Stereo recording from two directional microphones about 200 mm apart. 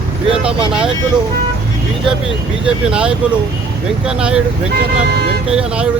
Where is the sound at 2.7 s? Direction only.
5° right (ahead or behind).